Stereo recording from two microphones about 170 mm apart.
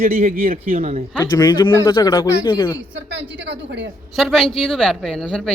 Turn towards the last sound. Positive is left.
turn(degrees=5)  # may be behind; listen again after turning